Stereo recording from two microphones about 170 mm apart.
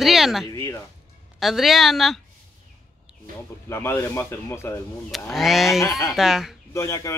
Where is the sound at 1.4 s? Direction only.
Centre (ahead or behind).